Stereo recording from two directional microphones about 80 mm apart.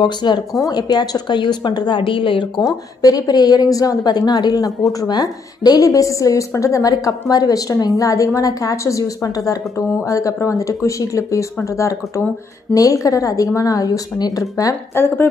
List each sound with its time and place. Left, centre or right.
0.0 s speech: left
0.6 s a woman's voice: left
2.6 s a woman's voice: left
15.0 s speech: left